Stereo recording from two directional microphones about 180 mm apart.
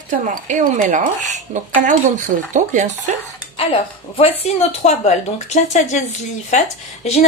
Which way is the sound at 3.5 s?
30° left (ahead or behind).